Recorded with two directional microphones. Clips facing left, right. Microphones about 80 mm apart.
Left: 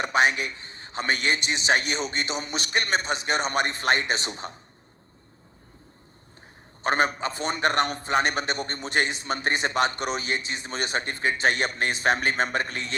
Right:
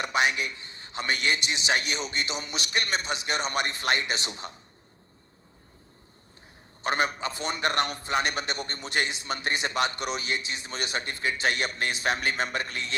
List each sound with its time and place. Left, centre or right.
0.0 s a man's voice: left
6.8 s a man's voice: left